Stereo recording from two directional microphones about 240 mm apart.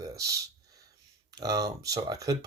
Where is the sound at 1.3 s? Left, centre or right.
Centre.